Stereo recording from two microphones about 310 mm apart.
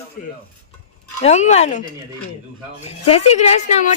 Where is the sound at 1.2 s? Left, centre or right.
Left.